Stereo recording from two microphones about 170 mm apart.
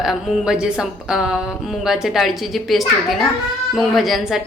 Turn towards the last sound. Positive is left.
turn(degrees=0)  # may be behind; listen again after turning